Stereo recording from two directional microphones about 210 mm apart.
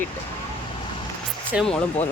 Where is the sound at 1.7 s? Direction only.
30° left (ahead or behind).